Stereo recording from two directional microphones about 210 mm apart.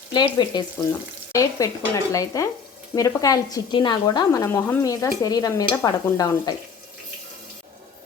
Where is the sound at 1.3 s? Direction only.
15° left (ahead or behind).